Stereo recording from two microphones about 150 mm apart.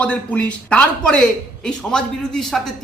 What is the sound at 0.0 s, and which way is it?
A man's voice, 10° left (ahead or behind).